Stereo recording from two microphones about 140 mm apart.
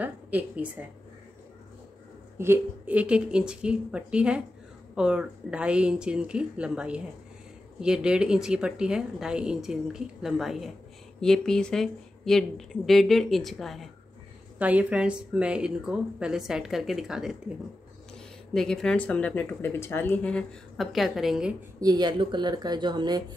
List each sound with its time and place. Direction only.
0.0 s a woman's voice: 10° right (ahead or behind)
2.3 s speech: 15° right (ahead or behind); by 13.8 s centre (ahead or behind)
14.6 s speech: 10° right (ahead or behind)
18.5 s speech: 5° left (ahead or behind)
21.7 s speech: 30° right (ahead or behind)